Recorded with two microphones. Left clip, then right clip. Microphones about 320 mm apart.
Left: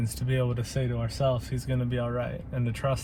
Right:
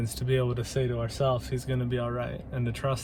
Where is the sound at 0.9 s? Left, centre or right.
Centre.